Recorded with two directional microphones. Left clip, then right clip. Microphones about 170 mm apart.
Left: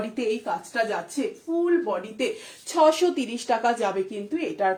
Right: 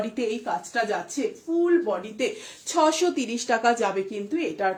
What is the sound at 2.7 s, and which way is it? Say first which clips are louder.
Speech: left 2 dB; 25° right (ahead or behind).